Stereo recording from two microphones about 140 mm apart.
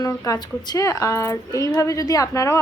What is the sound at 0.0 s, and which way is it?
A woman's voice, 25° left (ahead or behind).